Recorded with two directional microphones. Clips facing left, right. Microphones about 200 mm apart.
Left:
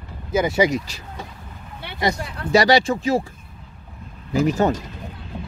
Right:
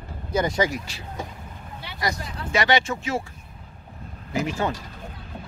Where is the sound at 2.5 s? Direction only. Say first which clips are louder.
Left 6 dB; 35° left (ahead or behind).